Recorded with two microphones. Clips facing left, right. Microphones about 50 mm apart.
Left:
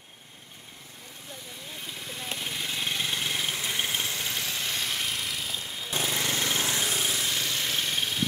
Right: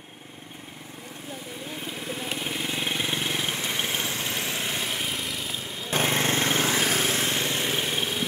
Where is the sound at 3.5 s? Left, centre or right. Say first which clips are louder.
Right 2 dB; right.